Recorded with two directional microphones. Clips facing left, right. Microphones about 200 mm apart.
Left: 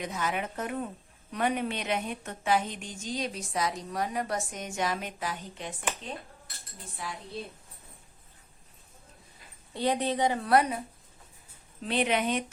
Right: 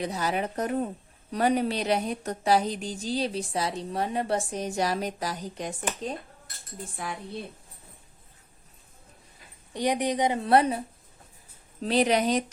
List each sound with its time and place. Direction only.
0.0 s a woman's voice: 35° right (ahead or behind)
6.9 s speech: 55° right (ahead or behind)
9.7 s a woman's voice: 15° right (ahead or behind)
11.8 s a woman's voice: 35° right (ahead or behind)